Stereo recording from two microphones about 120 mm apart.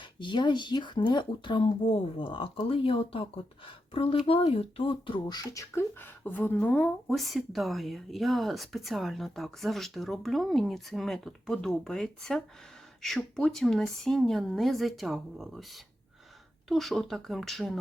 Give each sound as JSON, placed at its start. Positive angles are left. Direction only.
{"t": 0.0, "sound": "speech", "side_deg": 40}
{"t": 5.7, "sound": "speech", "side_deg": 20}
{"t": 7.1, "sound": "speech", "side_deg": 0}